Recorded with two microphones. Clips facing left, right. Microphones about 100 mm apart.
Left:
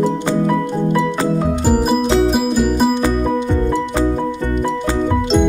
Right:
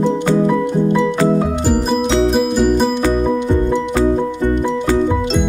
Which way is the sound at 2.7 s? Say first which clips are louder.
Even; 10° left (ahead or behind).